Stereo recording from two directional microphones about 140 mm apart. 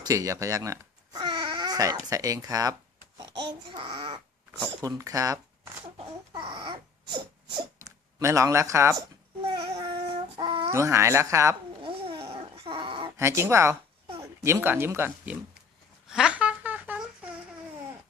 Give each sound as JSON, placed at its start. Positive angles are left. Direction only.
{"t": 0.0, "sound": "a child's voice", "side_deg": -25}
{"t": 4.8, "sound": "speech", "side_deg": -25}
{"t": 6.3, "sound": "a sound", "side_deg": -35}
{"t": 9.4, "sound": "child singing", "side_deg": -45}
{"t": 10.7, "sound": "speech", "side_deg": -20}
{"t": 11.8, "sound": "dog", "side_deg": -40}
{"t": 13.1, "sound": "speech", "side_deg": -20}
{"t": 16.0, "sound": "a sound", "side_deg": -5}